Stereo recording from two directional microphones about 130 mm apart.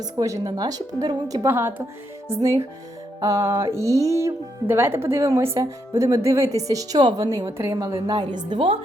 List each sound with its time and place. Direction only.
0.0 s a woman's voice: 25° right (ahead or behind); by 8.8 s 45° right (ahead or behind)